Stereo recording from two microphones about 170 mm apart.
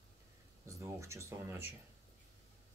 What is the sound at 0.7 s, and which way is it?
Speech, 20° right (ahead or behind).